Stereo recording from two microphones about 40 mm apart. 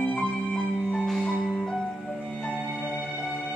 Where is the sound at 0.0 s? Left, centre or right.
Left.